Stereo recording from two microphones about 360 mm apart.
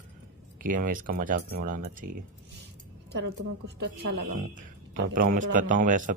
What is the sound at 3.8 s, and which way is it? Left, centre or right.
Speech, right.